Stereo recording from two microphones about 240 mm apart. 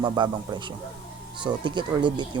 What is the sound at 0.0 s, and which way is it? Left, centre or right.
Speech, centre.